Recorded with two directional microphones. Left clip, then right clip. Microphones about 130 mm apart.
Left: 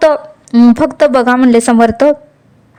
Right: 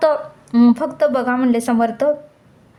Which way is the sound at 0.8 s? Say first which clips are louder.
Left 8 dB; 45° left (ahead or behind).